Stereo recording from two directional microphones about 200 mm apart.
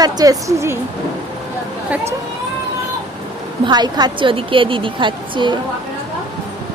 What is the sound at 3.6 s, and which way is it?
A woman's voice, 20° right (ahead or behind).